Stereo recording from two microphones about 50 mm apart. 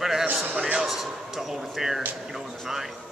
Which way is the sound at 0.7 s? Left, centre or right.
Centre.